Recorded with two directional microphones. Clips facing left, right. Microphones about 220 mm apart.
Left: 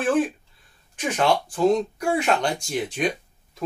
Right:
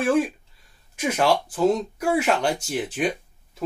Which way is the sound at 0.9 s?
10° right (ahead or behind).